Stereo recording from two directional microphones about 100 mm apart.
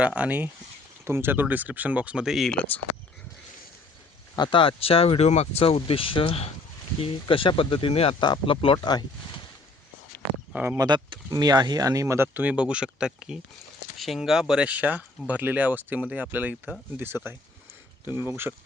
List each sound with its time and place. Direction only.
0.0 s speech: 15° right (ahead or behind)
2.6 s speech: 15° left (ahead or behind)
4.4 s speech: 55° left (ahead or behind)
8.2 s speech: 55° left (ahead or behind)
8.8 s speech: 45° left (ahead or behind)
10.5 s speech: 15° right (ahead or behind)
10.8 s speech: 45° right (ahead or behind); by 16.7 s 15° right (ahead or behind)
18.3 s speech: 20° right (ahead or behind)